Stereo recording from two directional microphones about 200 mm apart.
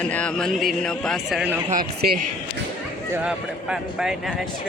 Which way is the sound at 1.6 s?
45° right (ahead or behind).